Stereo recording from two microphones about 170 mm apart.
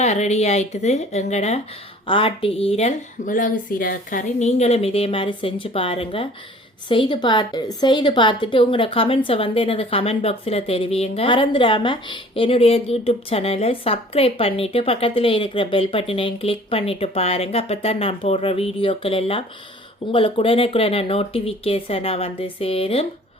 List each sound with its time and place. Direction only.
0.0 s a woman's voice: 40° left (ahead or behind)